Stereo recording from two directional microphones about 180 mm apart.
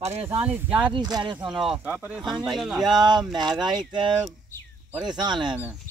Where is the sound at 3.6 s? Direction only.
25° right (ahead or behind).